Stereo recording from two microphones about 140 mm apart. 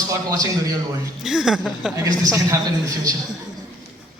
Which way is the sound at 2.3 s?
25° right (ahead or behind).